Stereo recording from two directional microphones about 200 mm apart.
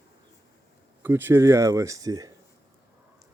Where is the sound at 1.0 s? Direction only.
10° right (ahead or behind).